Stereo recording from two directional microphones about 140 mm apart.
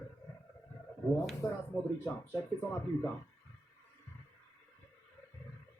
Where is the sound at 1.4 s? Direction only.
25° left (ahead or behind).